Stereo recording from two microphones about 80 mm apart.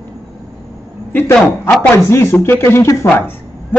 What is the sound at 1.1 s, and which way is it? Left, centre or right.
Speech, left.